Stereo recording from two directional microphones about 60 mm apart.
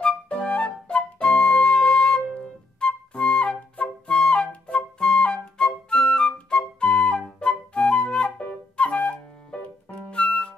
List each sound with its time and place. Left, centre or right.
0.0 s flute: centre